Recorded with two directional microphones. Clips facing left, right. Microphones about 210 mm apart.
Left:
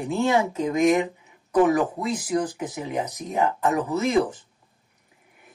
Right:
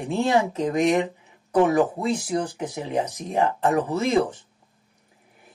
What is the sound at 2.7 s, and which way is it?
Speech, 30° right (ahead or behind).